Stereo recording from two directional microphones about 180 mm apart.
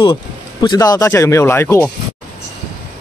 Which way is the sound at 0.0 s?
25° left (ahead or behind).